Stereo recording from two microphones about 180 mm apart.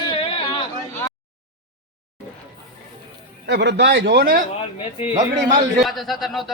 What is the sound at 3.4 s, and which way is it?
Speech, 70° right (ahead or behind).